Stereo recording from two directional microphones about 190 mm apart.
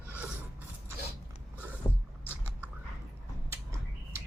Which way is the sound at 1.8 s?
15° left (ahead or behind).